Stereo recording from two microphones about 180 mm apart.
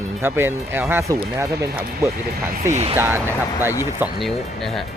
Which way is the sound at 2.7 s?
35° right (ahead or behind).